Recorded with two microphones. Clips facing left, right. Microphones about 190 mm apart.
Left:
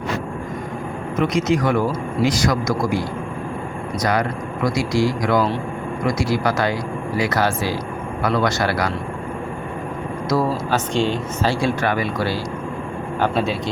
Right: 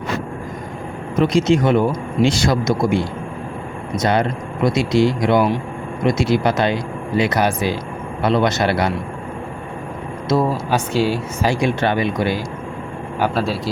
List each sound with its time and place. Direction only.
1.2 s speech: 30° right (ahead or behind)
10.2 s speech: 25° right (ahead or behind)
10.9 s speech: 10° right (ahead or behind)
11.8 s a man's voice: 25° right (ahead or behind)